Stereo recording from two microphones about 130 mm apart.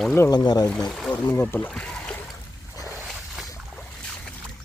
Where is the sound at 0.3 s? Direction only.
30° left (ahead or behind).